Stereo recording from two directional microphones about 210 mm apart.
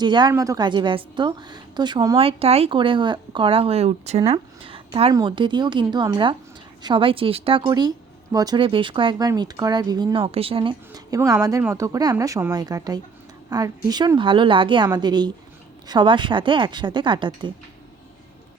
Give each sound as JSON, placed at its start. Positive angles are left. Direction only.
{"t": 0.0, "sound": "a woman's voice", "side_deg": -20}